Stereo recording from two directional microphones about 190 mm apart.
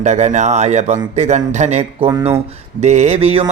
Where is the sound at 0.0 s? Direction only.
35° right (ahead or behind).